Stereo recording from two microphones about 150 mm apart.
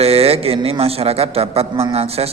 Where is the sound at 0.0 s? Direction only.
40° right (ahead or behind).